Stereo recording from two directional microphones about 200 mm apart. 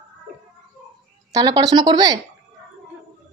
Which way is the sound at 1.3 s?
20° right (ahead or behind).